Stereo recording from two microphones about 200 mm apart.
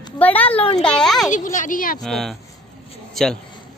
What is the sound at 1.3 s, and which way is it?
Speech, 40° left (ahead or behind).